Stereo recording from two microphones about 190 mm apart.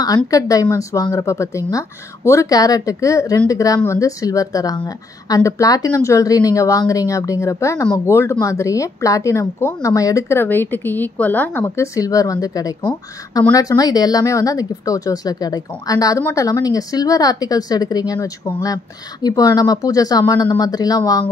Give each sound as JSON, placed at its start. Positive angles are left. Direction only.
{"t": 0.0, "sound": "speech", "side_deg": 20}